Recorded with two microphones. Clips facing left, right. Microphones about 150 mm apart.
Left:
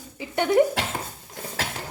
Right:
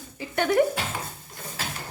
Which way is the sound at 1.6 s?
90° left.